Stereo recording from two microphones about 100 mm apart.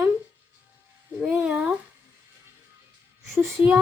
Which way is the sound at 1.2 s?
20° right (ahead or behind).